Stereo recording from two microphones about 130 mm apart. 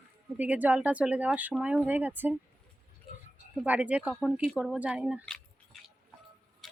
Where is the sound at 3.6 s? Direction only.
10° right (ahead or behind).